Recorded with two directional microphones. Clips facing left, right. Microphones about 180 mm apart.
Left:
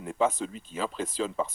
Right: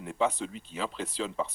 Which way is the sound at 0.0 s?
45° left (ahead or behind).